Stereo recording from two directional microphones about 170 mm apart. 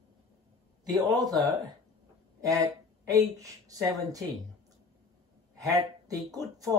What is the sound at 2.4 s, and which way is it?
Speech, 20° right (ahead or behind).